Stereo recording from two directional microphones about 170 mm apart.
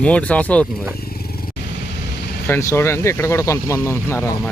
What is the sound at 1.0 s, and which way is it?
Motorcycle, 60° left (ahead or behind).